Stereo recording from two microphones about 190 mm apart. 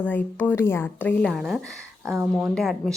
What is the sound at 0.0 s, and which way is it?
A woman's voice, 10° left (ahead or behind).